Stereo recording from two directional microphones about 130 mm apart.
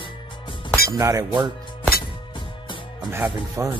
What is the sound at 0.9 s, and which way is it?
Speech, 25° right (ahead or behind).